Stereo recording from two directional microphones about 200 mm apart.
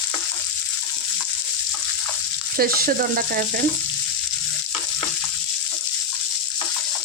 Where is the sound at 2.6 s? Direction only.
45° right (ahead or behind).